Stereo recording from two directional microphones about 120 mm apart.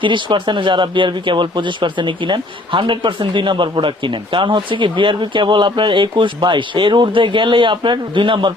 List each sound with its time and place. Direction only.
0.0 s speech: 40° right (ahead or behind)